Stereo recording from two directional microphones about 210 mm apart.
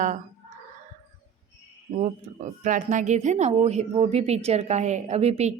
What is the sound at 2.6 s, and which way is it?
Speech, 35° right (ahead or behind).